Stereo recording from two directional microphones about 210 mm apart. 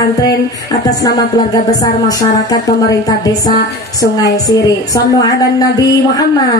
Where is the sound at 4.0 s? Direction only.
15° left (ahead or behind).